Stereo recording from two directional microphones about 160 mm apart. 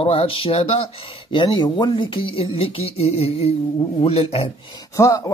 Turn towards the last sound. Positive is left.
turn(degrees=20)  # may be behind; listen again after turning